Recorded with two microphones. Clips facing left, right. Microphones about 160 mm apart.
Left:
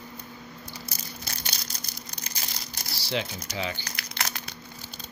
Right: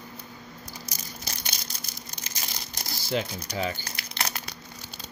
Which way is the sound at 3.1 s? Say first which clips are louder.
Right 2 dB; 45° right (ahead or behind).